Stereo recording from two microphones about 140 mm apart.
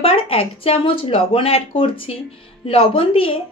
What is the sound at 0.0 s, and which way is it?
A woman's voice, 40° left (ahead or behind).